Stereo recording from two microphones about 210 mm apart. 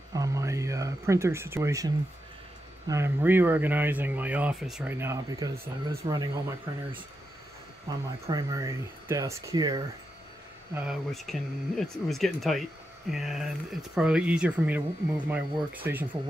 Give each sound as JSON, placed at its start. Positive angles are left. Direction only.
{"t": 0.1, "sound": "a sound", "side_deg": -15}
{"t": 2.9, "sound": "speech", "side_deg": -10}
{"t": 8.3, "sound": "speech", "side_deg": -15}
{"t": 10.7, "sound": "speech", "side_deg": -5}